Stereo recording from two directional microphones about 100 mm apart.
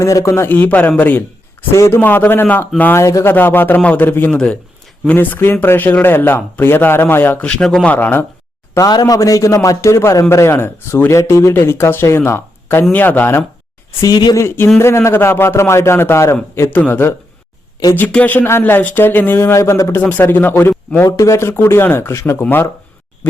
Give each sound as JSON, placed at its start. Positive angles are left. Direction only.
{"t": 0.0, "sound": "a man's voice", "side_deg": 30}
{"t": 3.0, "sound": "speech", "side_deg": 30}
{"t": 3.3, "sound": "a man's voice", "side_deg": 20}
{"t": 4.3, "sound": "a man's voice", "side_deg": 10}
{"t": 7.4, "sound": "speech", "side_deg": 10}
{"t": 7.9, "sound": "a man's voice", "side_deg": 20}
{"t": 8.7, "sound": "a man's voice", "side_deg": 40}
{"t": 14.0, "sound": "speech", "side_deg": 45}
{"t": 14.3, "sound": "a man's voice", "side_deg": 25}
{"t": 16.6, "sound": "a man's voice", "side_deg": 15}